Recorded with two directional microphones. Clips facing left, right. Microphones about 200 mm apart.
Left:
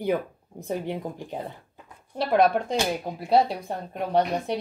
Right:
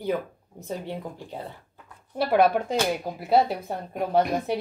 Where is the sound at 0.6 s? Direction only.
15° left (ahead or behind).